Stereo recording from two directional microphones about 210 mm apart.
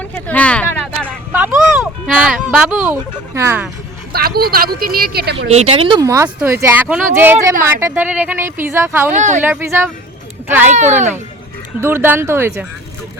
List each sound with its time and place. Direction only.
0.0 s a sound: 5° left (ahead or behind)
1.0 s a sound: 10° right (ahead or behind)
4.1 s a woman's voice: 45° right (ahead or behind)
5.5 s speech: 30° right (ahead or behind); by 9.1 s 10° right (ahead or behind)
9.1 s speech: 35° right (ahead or behind)
9.4 s speech: 10° right (ahead or behind)
10.7 s speech: 35° right (ahead or behind)
11.8 s speech: 10° right (ahead or behind)